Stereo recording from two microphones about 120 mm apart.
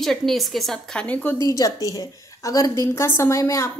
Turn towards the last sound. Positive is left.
turn(degrees=25)  # may be behind; listen again after turning